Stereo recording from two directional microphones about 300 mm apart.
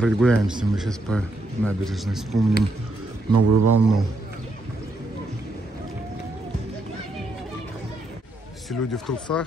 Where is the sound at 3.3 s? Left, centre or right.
Right.